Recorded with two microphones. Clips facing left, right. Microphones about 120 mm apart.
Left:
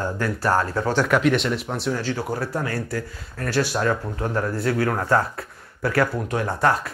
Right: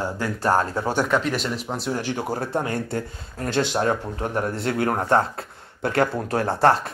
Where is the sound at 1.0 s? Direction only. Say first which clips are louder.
Left 5 dB; centre (ahead or behind).